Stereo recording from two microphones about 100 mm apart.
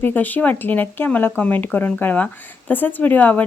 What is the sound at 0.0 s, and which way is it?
A woman's voice, 15° left (ahead or behind).